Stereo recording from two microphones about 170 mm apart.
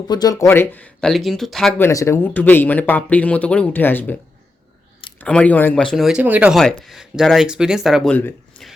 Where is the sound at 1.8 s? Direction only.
20° left (ahead or behind).